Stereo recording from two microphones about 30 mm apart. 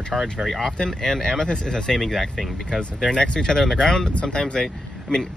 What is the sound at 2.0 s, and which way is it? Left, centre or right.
Speech, centre.